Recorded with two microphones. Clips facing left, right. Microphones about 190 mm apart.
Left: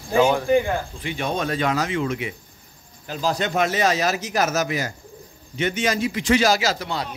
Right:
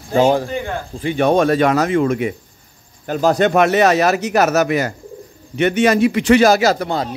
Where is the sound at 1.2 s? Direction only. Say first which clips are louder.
Right 11 dB; 60° right (ahead or behind).